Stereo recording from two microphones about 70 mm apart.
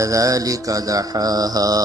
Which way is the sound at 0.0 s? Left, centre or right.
Right.